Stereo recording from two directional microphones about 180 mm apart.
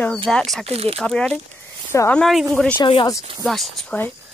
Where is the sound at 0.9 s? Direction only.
5° left (ahead or behind).